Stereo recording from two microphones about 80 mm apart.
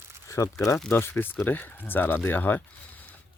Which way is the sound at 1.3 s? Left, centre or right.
Left.